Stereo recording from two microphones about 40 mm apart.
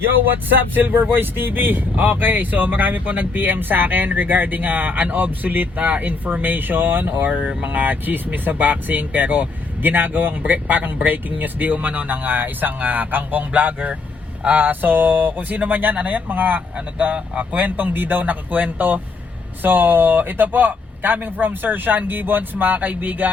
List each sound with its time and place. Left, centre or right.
0.0 s speech: right
7.3 s speech: right